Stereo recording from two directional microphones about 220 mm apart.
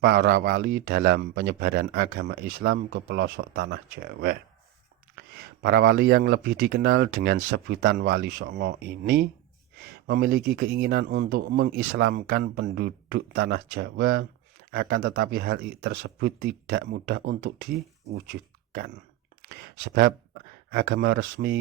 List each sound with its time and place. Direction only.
0.0 s speech: 45° right (ahead or behind)
5.1 s speech: 40° right (ahead or behind)